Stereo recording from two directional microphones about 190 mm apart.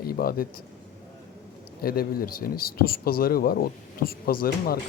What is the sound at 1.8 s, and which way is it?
A man's voice, 50° left (ahead or behind).